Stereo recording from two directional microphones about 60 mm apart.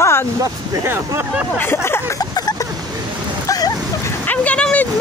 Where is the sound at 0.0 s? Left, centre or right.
Left.